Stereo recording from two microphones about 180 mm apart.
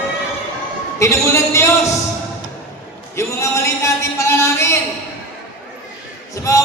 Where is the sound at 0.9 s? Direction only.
15° left (ahead or behind).